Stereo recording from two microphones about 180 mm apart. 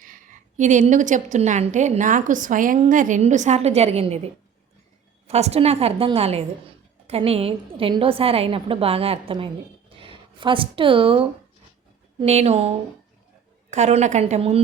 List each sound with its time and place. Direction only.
0.0 s a woman's voice: 45° right (ahead or behind)
5.3 s a woman's voice: 35° right (ahead or behind)